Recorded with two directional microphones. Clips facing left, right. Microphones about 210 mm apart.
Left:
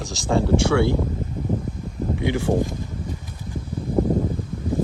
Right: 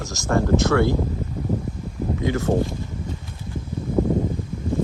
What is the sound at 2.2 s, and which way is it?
Speech, 15° left (ahead or behind).